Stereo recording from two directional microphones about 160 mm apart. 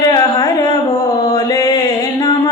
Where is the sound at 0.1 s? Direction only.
20° left (ahead or behind).